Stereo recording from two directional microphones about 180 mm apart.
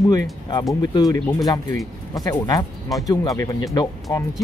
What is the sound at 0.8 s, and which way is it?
Speech, 20° left (ahead or behind).